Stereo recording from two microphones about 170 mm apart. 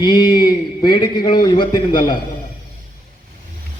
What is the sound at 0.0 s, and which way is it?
A man's voice, 25° left (ahead or behind).